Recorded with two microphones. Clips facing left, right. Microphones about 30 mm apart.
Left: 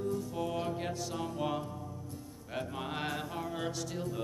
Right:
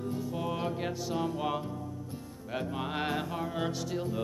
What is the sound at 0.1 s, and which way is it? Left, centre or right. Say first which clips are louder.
Music: right 1 dB; centre.